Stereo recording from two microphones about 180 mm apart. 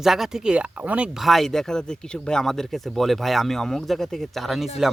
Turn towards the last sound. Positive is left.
turn(degrees=0)  # may be behind; listen again after turning